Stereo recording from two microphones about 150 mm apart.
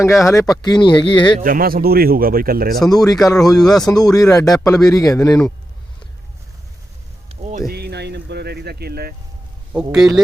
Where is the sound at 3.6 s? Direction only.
5° left (ahead or behind).